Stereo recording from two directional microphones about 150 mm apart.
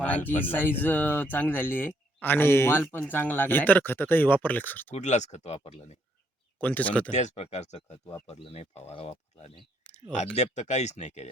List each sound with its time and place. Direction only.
0.0 s speech: 10° left (ahead or behind)
4.9 s speech: 50° left (ahead or behind)
6.6 s speech: 10° left (ahead or behind)
7.1 s speech: 50° left (ahead or behind)